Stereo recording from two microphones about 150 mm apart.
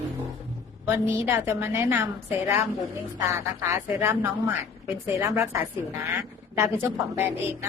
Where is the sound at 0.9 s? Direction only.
15° right (ahead or behind).